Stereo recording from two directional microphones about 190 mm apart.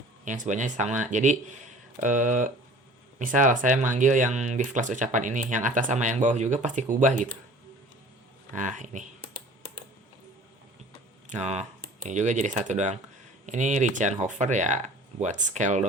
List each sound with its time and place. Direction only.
0.3 s speech: 40° right (ahead or behind)
8.5 s speech: 40° right (ahead or behind)
11.3 s speech: 35° right (ahead or behind)